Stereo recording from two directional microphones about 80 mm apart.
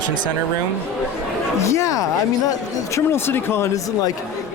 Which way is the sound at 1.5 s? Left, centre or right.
Left.